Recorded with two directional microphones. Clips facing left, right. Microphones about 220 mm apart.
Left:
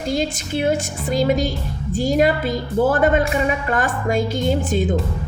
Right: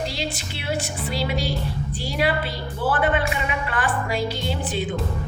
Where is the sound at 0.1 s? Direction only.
45° left (ahead or behind).